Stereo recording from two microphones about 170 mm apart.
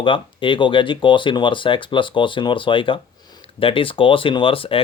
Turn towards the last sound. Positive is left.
turn(degrees=30)  # may be behind; listen again after turning